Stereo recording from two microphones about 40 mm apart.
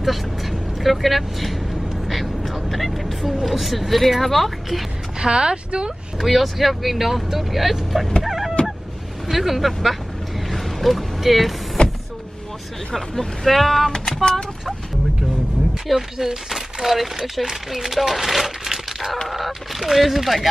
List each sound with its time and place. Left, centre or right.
0.0 s speech: centre
5.2 s speech: right
6.1 s speech: centre
8.2 s a sound: centre
9.3 s speech: centre
10.5 s vehicle: centre
12.9 s speech: centre
15.9 s speech: centre